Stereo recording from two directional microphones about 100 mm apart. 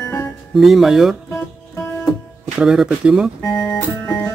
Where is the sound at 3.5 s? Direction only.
5° left (ahead or behind).